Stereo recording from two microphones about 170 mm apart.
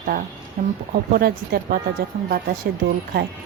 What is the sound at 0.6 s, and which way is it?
Speech, 45° right (ahead or behind).